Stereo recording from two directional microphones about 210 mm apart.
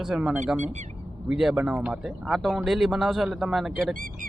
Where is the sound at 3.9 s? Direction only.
40° right (ahead or behind).